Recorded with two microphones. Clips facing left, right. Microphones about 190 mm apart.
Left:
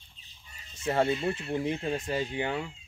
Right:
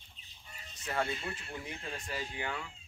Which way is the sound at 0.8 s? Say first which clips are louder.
Left 9 dB; 30° left (ahead or behind).